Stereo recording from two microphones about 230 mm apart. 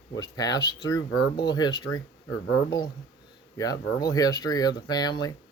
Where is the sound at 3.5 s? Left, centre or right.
Centre.